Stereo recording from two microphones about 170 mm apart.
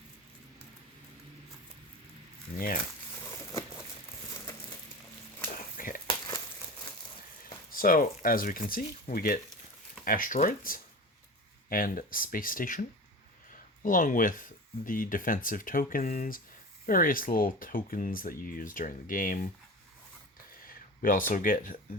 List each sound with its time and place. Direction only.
2.6 s speech: 55° left (ahead or behind)
3.2 s crumpling: 20° left (ahead or behind)
5.7 s a sound: 55° left (ahead or behind)
6.1 s crumpling: 25° left (ahead or behind)
7.7 s speech: 55° left (ahead or behind)
13.5 s a sound: 55° left (ahead or behind)
14.8 s speech: 55° left (ahead or behind)
20.7 s speech: 55° left (ahead or behind)